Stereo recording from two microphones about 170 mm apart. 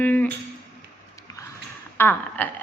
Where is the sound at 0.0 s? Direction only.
10° left (ahead or behind).